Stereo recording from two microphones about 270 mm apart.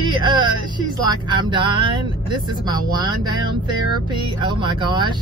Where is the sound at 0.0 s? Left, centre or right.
Centre.